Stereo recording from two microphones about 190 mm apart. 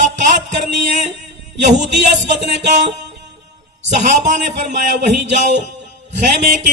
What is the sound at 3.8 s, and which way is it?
Music, 40° right (ahead or behind).